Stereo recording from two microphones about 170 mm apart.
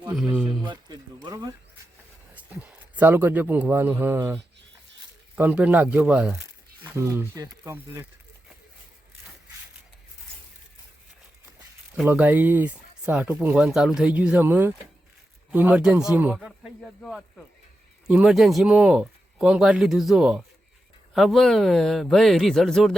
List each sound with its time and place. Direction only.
0.2 s a sound: 5° right (ahead or behind)
0.7 s a sound: 25° right (ahead or behind)
2.3 s speech: 10° right (ahead or behind)
5.4 s speech: 10° right (ahead or behind)
6.8 s speech: 15° right (ahead or behind)
12.0 s speech: 10° right (ahead or behind)